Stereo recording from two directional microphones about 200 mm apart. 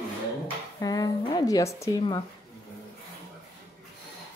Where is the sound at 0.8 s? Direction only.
20° left (ahead or behind).